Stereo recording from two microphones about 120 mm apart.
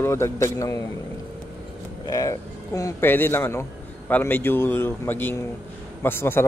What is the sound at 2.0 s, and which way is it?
Speech, 30° left (ahead or behind).